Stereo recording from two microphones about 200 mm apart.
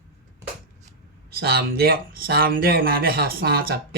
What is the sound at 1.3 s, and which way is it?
Speech, 50° right (ahead or behind).